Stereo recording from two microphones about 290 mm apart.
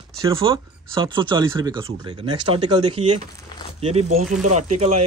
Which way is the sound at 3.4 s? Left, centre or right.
Centre.